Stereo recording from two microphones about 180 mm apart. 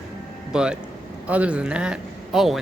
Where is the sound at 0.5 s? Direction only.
5° right (ahead or behind).